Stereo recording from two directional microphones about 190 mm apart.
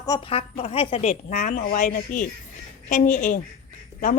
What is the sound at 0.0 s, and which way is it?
A woman's voice, 25° left (ahead or behind).